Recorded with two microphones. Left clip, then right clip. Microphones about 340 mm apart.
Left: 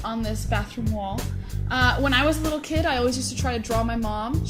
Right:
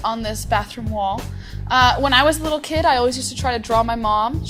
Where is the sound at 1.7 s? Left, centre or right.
Right.